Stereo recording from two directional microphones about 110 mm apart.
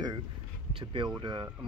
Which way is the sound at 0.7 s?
50° right (ahead or behind).